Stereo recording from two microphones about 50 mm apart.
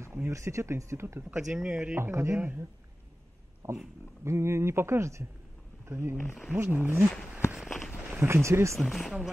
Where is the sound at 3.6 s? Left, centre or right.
Right.